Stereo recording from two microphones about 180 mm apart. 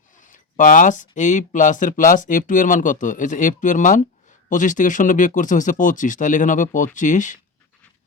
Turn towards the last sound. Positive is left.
turn(degrees=45)  # may be behind; listen again after turning